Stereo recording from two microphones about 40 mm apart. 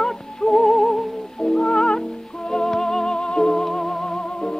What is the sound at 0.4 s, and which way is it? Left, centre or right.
Music, centre.